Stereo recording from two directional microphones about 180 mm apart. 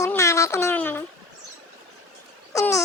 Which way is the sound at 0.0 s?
15° left (ahead or behind).